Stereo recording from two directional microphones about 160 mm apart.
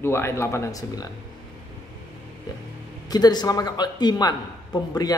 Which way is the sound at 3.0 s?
25° left (ahead or behind).